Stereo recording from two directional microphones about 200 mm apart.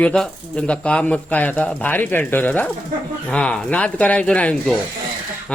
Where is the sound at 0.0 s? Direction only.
5° left (ahead or behind).